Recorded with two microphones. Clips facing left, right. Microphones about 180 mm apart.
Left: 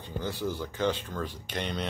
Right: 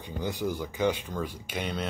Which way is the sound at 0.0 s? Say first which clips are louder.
Right 1 dB; 15° right (ahead or behind).